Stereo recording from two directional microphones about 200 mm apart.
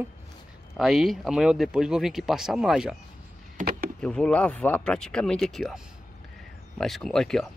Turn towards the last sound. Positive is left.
turn(degrees=0)  # may be behind; listen again after turning